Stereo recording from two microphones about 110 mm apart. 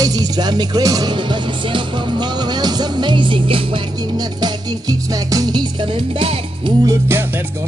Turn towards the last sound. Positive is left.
turn(degrees=-20)  # may be behind; listen again after turning